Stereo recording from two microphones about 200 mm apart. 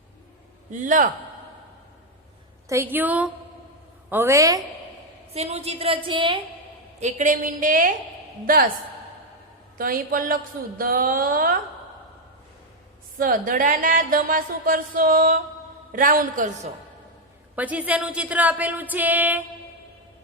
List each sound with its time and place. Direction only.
0.7 s a woman's voice: 40° right (ahead or behind)
2.6 s speech: 10° right (ahead or behind)
5.3 s a woman's voice: 30° right (ahead or behind)
7.0 s a woman's voice: 40° right (ahead or behind)
9.7 s speech: 45° right (ahead or behind)
13.1 s a woman's voice: 45° right (ahead or behind)
17.5 s speech: 5° right (ahead or behind)